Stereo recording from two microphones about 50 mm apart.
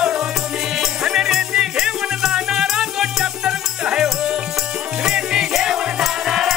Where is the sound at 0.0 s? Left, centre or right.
Centre.